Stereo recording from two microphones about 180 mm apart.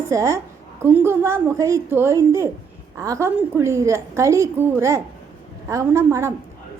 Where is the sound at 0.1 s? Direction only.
15° right (ahead or behind).